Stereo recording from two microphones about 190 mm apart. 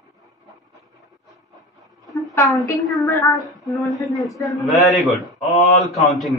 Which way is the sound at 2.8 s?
Centre (ahead or behind).